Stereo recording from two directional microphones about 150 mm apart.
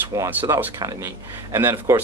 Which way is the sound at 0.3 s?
10° right (ahead or behind).